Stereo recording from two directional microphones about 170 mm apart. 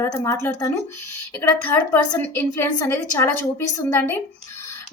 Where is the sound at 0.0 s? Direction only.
20° left (ahead or behind).